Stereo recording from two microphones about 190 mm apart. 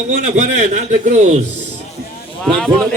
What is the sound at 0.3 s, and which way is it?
A man's voice, 40° right (ahead or behind).